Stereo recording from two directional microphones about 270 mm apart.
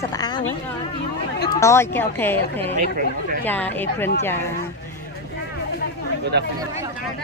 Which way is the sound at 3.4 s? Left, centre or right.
Centre.